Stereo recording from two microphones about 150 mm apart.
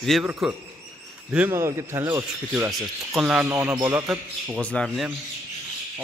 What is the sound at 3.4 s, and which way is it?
Speech, 20° right (ahead or behind).